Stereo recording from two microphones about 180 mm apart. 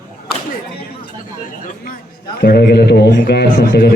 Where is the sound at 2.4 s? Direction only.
65° left (ahead or behind).